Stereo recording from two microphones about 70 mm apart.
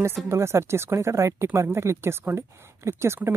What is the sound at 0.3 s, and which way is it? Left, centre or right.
Speech, right.